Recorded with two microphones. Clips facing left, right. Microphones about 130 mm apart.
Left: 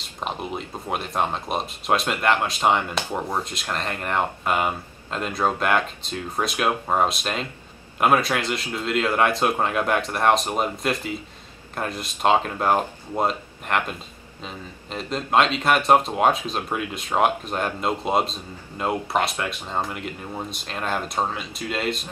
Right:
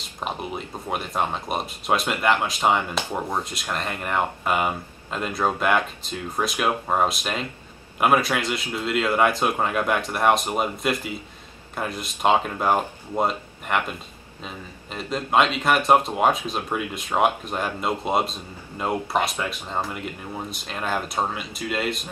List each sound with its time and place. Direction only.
0.2 s speech: centre (ahead or behind)
19.4 s speech: 10° left (ahead or behind); by 22.0 s 5° right (ahead or behind)